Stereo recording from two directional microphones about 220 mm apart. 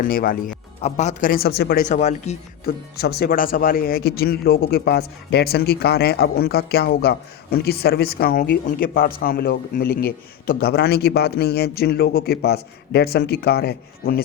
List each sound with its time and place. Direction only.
0.0 s speech: 40° left (ahead or behind)
1.9 s speech: 30° left (ahead or behind)